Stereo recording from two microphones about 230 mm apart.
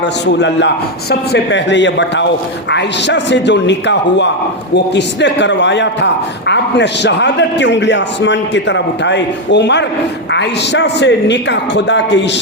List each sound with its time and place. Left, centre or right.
0.0 s a man's voice: left